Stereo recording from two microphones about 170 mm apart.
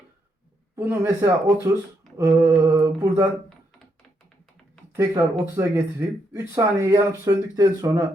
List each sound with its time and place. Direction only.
0.8 s speech: 15° right (ahead or behind)
4.9 s speech: 15° right (ahead or behind)